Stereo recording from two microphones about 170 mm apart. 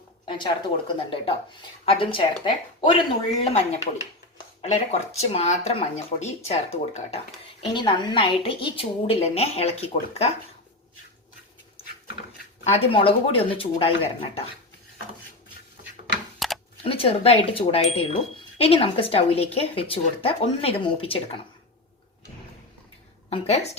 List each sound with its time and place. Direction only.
0.3 s speech: 30° left (ahead or behind)
12.7 s speech: 30° left (ahead or behind)
16.4 s typing: centre (ahead or behind)
16.8 s speech: 35° left (ahead or behind)
23.3 s speech: 35° left (ahead or behind)